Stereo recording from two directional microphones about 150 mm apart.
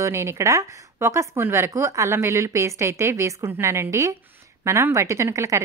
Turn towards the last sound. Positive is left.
turn(degrees=-20)  # may be behind; listen again after turning